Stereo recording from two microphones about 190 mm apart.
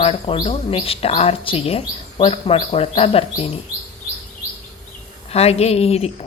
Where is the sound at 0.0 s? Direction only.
30° left (ahead or behind).